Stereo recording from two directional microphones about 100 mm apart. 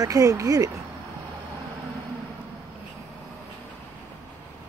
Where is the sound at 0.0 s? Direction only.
35° right (ahead or behind).